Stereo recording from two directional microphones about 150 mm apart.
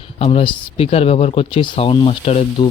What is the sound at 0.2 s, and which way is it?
Speech, 40° left (ahead or behind).